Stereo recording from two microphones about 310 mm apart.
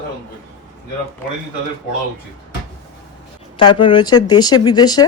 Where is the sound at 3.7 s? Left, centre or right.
Centre.